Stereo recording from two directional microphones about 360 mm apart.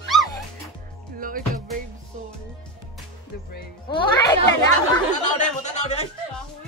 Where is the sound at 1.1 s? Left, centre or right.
Right.